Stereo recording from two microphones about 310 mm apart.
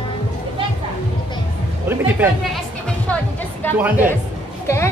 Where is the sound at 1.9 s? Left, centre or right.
Centre.